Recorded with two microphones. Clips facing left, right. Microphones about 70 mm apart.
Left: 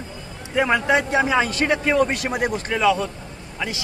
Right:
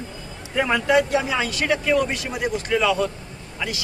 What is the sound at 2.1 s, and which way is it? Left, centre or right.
Speech, left.